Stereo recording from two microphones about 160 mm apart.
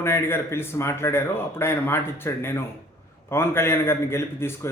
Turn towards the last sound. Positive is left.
turn(degrees=15)  # may be behind; listen again after turning